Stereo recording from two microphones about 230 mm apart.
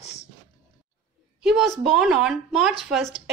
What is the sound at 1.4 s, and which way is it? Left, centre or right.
Speech, centre.